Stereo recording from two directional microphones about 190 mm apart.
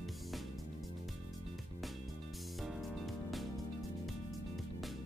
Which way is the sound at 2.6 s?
Centre (ahead or behind).